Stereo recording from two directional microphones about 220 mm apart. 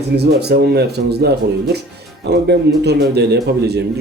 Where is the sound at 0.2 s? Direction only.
50° right (ahead or behind).